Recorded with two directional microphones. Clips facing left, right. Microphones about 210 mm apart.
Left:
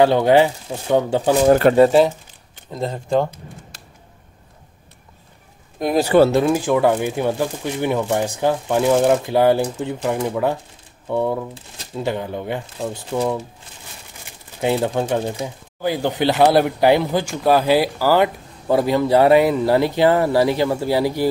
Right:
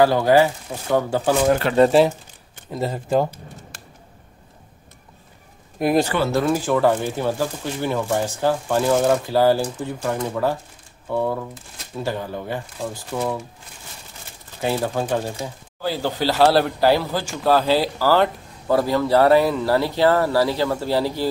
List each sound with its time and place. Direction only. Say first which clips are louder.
0.0 s speech: left 2 dB; 25° left (ahead or behind)
1.8 s speech: left 2 dB; centre (ahead or behind)
5.8 s speech: even; 5° right (ahead or behind)
6.3 s speech: left 3 dB; 15° left (ahead or behind)
14.6 s speech: left 3 dB; 20° left (ahead or behind)